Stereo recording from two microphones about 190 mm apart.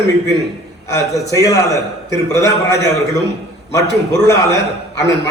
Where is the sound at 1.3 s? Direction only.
15° left (ahead or behind).